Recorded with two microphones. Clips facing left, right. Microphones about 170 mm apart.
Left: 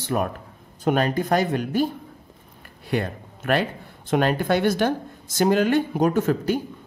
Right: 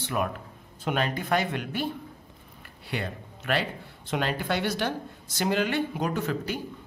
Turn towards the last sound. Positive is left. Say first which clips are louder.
# left 8 dB
turn(degrees=45)  # may be behind; listen again after turning